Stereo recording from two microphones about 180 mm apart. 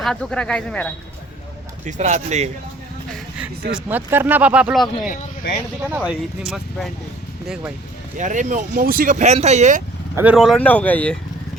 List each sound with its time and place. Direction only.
0.0 s speech: 5° left (ahead or behind)
1.8 s speech: 40° right (ahead or behind)
3.1 s a sound: 5° right (ahead or behind)
3.7 s speech: 5° right (ahead or behind)
8.2 s speech: 45° right (ahead or behind)
10.2 s speech: 5° right (ahead or behind)